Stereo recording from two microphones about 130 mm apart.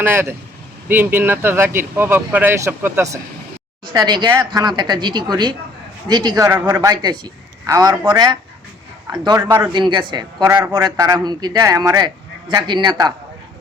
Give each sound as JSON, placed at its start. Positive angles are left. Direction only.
{"t": 0.0, "sound": "speech", "side_deg": -20}
{"t": 3.8, "sound": "a man's voice", "side_deg": -35}
{"t": 6.9, "sound": "a man's voice", "side_deg": -35}
{"t": 10.4, "sound": "a man's voice", "side_deg": -20}